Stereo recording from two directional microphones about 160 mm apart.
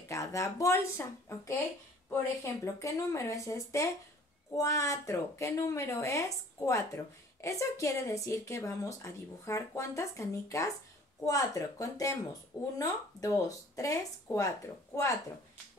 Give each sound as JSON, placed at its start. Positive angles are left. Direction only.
{"t": 0.1, "sound": "speech", "side_deg": 20}